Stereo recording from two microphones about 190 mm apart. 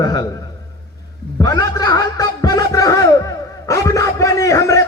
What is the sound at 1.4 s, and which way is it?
A man's voice, 20° left (ahead or behind).